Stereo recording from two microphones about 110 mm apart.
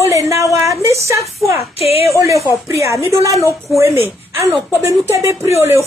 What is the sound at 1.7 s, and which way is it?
Speech, 65° left (ahead or behind).